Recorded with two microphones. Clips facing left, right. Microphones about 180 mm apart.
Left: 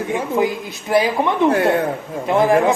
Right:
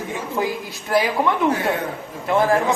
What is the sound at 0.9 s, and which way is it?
Speech, 20° left (ahead or behind).